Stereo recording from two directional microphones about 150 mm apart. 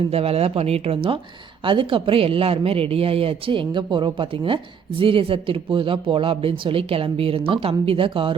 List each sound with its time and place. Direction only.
0.1 s speech: 40° right (ahead or behind)